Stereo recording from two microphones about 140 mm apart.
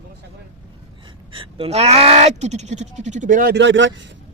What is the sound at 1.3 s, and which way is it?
Speech, 40° right (ahead or behind).